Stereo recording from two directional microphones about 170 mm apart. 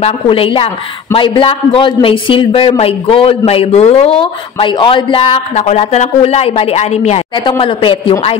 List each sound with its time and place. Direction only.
0.0 s a man's voice: 35° left (ahead or behind)